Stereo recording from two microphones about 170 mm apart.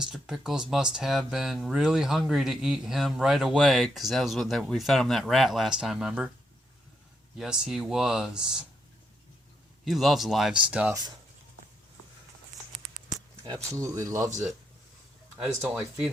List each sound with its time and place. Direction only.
0.0 s speech: centre (ahead or behind)
7.3 s speech: 5° right (ahead or behind)
9.8 s speech: centre (ahead or behind)
13.4 s speech: 25° right (ahead or behind)